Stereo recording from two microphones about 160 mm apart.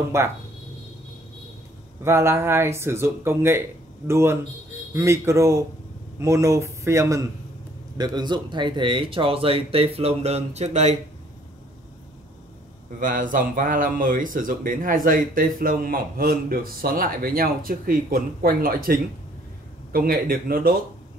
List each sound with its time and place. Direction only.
0.1 s speech: 15° right (ahead or behind)
2.0 s speech: 15° right (ahead or behind); by 11.0 s 45° right (ahead or behind)
13.0 s speech: 55° right (ahead or behind)